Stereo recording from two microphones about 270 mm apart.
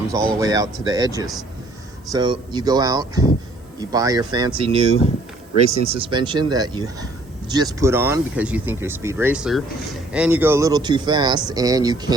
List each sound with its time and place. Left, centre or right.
0.3 s speech: centre